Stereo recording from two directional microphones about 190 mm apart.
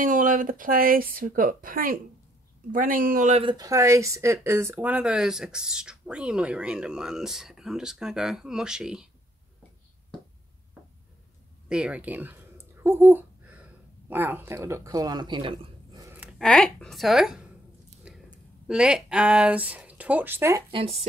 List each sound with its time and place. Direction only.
0.0 s a woman's voice: 45° right (ahead or behind)
3.4 s speech: 20° right (ahead or behind); by 9.1 s 5° right (ahead or behind)
11.7 s a sound: 5° right (ahead or behind)
16.2 s speech: centre (ahead or behind)
18.1 s a sound: 5° right (ahead or behind)
18.7 s speech: 5° right (ahead or behind)
20.7 s speech: 30° right (ahead or behind)